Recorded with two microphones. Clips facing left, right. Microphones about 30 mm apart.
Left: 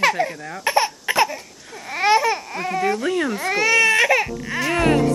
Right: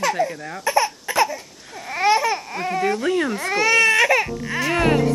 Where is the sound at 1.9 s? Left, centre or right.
Centre.